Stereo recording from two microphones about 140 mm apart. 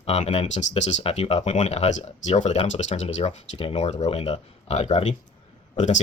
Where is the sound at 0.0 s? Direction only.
50° left (ahead or behind).